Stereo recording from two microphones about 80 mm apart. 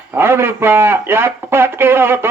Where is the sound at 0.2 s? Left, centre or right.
Right.